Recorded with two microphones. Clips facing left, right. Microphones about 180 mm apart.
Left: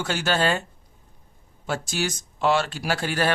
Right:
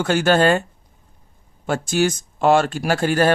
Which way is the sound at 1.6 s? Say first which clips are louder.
Right 8 dB; 50° right (ahead or behind).